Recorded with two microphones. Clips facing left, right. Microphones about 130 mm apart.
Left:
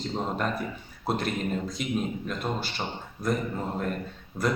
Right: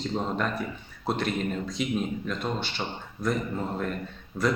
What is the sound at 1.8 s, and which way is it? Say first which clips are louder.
Speech: right 7 dB; 45° left (ahead or behind).